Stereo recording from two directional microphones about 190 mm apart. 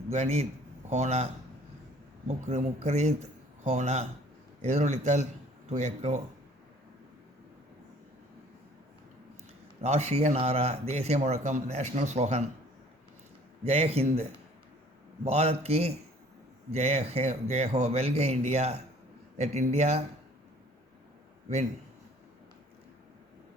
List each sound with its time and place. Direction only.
0.1 s speech: 35° right (ahead or behind)
9.8 s speech: 35° right (ahead or behind)
13.7 s speech: 35° right (ahead or behind)